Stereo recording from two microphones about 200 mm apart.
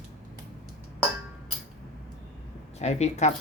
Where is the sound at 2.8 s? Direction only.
35° left (ahead or behind).